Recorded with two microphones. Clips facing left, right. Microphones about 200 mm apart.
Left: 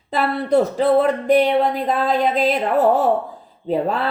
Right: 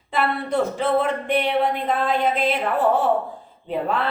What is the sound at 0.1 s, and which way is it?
A woman's voice, 40° left (ahead or behind).